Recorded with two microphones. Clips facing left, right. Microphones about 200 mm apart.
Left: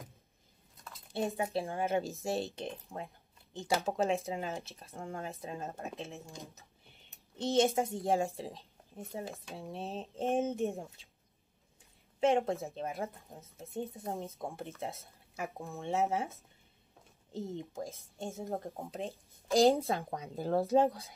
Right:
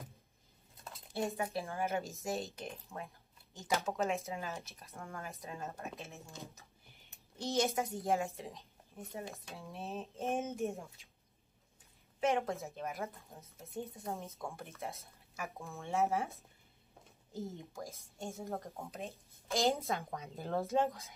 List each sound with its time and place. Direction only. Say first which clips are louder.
1.1 s a woman's voice: left 3 dB; 25° left (ahead or behind)
6.2 s speech: left 2 dB; 15° left (ahead or behind)
7.5 s a woman's voice: left 5 dB; 30° left (ahead or behind)
12.2 s a woman's voice: left 5 dB; 30° left (ahead or behind)
17.6 s speech: left 6 dB; 30° left (ahead or behind)